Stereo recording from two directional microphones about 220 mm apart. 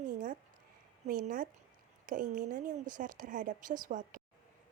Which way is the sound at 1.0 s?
40° right (ahead or behind).